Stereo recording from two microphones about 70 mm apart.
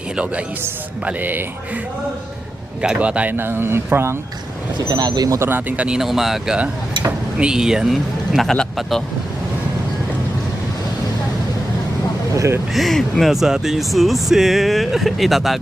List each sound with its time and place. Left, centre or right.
1.0 s speech: right
2.8 s speech: centre
3.3 s speech: right
4.9 s speech: right
5.4 s speech: right
6.0 s speech: centre
8.4 s speech: centre
12.3 s a sound: right
12.7 s speech: centre